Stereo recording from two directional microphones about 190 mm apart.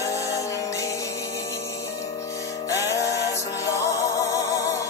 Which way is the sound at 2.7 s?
15° left (ahead or behind).